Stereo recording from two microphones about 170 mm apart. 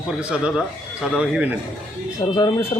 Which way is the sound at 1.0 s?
5° right (ahead or behind).